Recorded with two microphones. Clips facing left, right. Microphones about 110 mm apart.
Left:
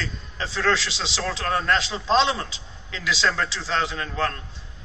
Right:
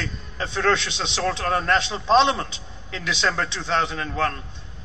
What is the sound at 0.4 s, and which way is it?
A man's voice, centre (ahead or behind).